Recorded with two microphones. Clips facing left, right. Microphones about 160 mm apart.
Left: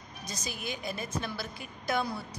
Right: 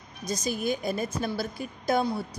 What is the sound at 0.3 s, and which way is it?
A woman's voice, 45° right (ahead or behind).